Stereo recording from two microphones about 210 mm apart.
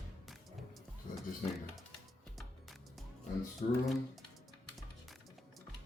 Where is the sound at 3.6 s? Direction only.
35° left (ahead or behind).